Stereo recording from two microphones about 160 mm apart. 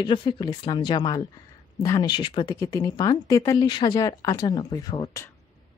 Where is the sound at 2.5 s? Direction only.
20° left (ahead or behind).